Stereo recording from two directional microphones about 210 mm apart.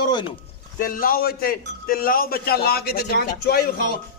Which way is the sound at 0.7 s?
40° left (ahead or behind).